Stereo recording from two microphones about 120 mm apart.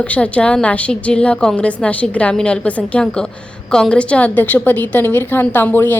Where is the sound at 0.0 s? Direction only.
10° left (ahead or behind).